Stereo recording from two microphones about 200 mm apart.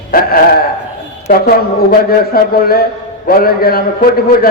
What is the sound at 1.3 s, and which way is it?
A man's voice, 50° left (ahead or behind).